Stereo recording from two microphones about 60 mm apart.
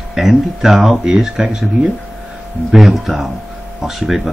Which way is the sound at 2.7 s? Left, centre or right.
Centre.